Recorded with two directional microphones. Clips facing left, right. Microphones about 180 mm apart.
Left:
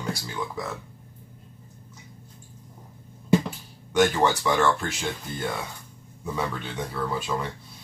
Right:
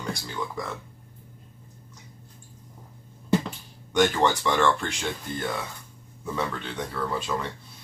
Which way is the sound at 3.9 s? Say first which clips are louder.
Left 1 dB; 5° left (ahead or behind).